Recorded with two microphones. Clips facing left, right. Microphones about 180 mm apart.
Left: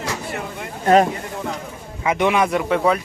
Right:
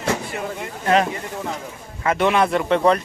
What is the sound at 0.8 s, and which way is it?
Speech, 40° left (ahead or behind).